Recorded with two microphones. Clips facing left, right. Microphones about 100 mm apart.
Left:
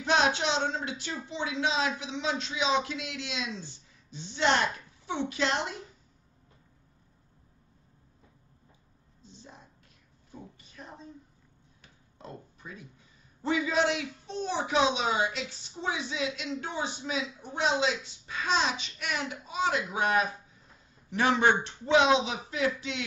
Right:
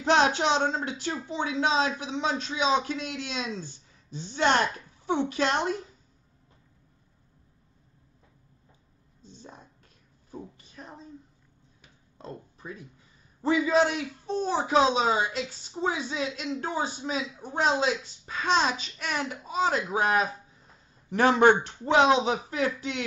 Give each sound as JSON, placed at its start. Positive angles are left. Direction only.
{"t": 0.0, "sound": "a woman's voice", "side_deg": -45}
{"t": 12.2, "sound": "a woman's voice", "side_deg": -35}